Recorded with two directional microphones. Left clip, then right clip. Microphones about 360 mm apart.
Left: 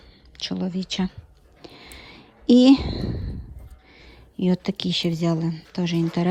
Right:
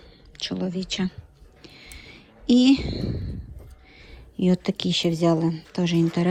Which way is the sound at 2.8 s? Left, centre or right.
Centre.